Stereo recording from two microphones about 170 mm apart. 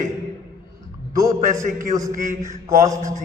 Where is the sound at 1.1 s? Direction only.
20° right (ahead or behind).